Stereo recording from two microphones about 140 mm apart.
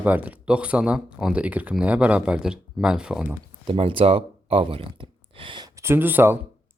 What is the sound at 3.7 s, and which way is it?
Speech, 40° right (ahead or behind).